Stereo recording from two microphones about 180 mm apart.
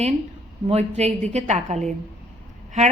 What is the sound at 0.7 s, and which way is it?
Speech, 35° right (ahead or behind).